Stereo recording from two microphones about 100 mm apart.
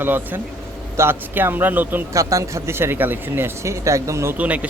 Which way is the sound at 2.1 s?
30° right (ahead or behind).